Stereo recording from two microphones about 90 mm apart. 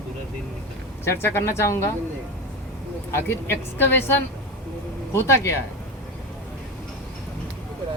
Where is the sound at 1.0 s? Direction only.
25° left (ahead or behind).